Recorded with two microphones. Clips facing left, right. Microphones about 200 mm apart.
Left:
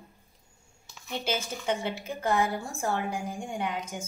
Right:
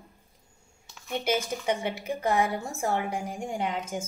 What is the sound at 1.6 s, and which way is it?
Speech, 15° right (ahead or behind).